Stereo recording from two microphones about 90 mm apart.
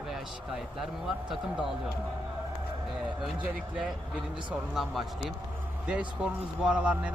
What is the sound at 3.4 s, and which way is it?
Speech, 15° right (ahead or behind).